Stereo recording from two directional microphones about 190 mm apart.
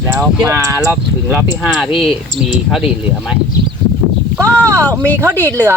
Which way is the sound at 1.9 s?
30° left (ahead or behind).